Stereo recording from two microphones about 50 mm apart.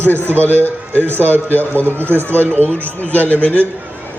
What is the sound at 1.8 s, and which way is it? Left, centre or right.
Speech, right.